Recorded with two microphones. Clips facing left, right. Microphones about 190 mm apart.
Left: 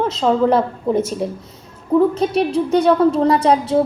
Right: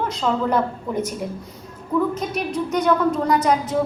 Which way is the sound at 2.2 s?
30° left (ahead or behind).